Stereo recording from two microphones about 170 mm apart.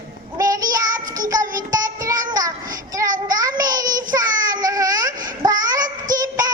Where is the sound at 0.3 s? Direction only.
20° right (ahead or behind).